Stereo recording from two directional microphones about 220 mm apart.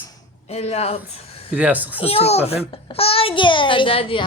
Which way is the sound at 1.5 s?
5° right (ahead or behind).